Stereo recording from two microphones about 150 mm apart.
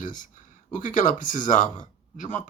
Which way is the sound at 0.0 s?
60° left (ahead or behind).